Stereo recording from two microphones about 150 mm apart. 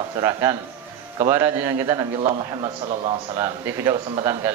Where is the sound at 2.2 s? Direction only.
35° right (ahead or behind).